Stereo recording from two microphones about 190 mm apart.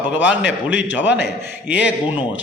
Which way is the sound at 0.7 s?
75° left (ahead or behind).